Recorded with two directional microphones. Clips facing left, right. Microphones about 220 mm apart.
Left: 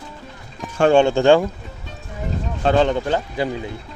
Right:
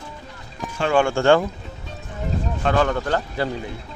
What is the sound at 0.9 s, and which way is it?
Speech, 20° left (ahead or behind).